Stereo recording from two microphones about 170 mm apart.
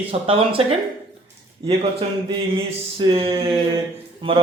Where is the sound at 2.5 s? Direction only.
35° right (ahead or behind).